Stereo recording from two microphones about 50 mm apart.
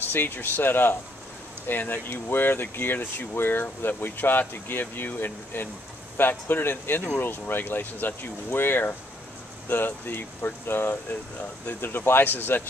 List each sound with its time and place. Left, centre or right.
0.0 s speech: left